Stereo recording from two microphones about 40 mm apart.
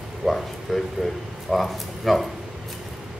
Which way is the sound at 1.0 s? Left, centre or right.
Centre.